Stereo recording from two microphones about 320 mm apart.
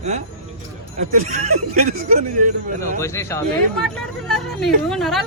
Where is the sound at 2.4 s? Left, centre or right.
Right.